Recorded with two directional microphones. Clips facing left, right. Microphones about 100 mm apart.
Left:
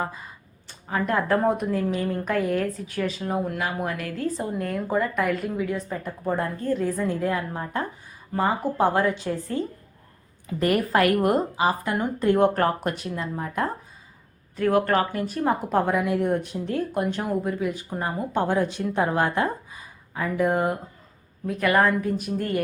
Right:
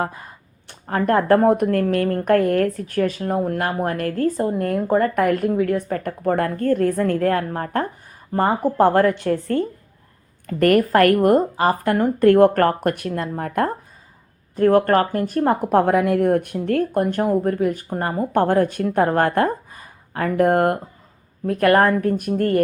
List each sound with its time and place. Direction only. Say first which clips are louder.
0.0 s a woman's voice: right 5 dB; 60° right (ahead or behind)
14.5 s a woman's voice: right 6 dB; 45° right (ahead or behind)